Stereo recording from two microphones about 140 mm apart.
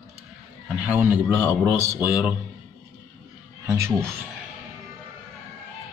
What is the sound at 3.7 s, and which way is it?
Speech, 20° right (ahead or behind).